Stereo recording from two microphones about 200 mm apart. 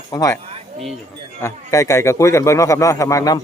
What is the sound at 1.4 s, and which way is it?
Speech, 15° left (ahead or behind).